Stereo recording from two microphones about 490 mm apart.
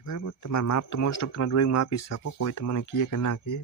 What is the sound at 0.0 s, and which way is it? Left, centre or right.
Speech, left.